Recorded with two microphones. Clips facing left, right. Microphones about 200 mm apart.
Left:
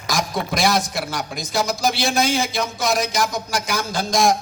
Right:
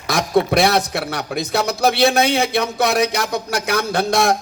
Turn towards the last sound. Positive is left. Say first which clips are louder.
# right 2 dB
turn(degrees=-65)  # may be behind; listen again after turning